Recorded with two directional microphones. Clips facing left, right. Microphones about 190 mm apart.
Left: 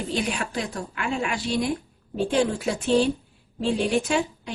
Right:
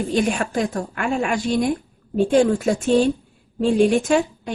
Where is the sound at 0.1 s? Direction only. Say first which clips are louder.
Right 6 dB; 50° right (ahead or behind).